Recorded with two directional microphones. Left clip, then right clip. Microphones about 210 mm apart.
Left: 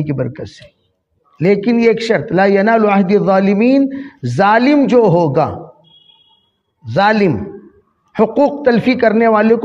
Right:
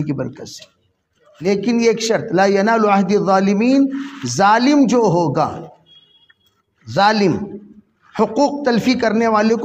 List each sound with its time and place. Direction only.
0.0 s a man's voice: 30° left (ahead or behind)
6.8 s a man's voice: 30° left (ahead or behind)